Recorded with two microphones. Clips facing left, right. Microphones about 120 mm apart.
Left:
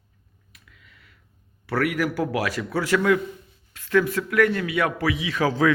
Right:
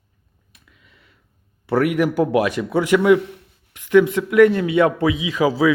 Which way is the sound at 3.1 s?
75° right (ahead or behind).